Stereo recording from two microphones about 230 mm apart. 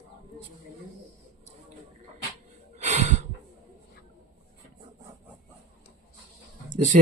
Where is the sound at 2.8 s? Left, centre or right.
Right.